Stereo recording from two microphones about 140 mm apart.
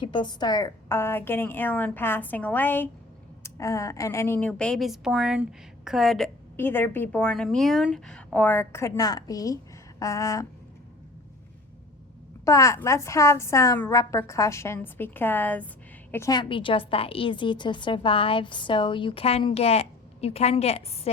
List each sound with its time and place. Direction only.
0.0 s a woman's voice: 35° left (ahead or behind); by 6.3 s centre (ahead or behind)
6.6 s a woman's voice: 15° left (ahead or behind)
12.5 s a woman's voice: 20° left (ahead or behind)
16.4 s a woman's voice: 35° left (ahead or behind)